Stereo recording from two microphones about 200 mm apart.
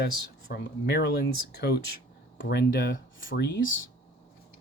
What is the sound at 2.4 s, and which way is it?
Speech, 50° left (ahead or behind).